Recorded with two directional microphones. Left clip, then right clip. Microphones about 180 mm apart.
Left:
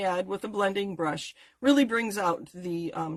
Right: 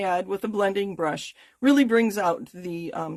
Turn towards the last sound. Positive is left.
turn(degrees=-45)  # may be behind; listen again after turning